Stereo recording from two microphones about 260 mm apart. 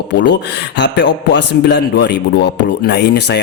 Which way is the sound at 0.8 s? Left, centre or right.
Left.